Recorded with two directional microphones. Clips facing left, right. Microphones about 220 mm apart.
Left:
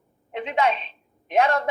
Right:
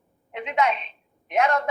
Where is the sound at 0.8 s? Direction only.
30° left (ahead or behind).